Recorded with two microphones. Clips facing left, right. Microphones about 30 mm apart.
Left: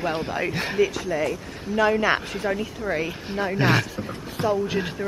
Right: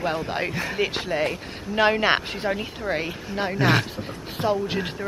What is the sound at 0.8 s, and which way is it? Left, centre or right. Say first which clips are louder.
Speech: left 2 dB; right.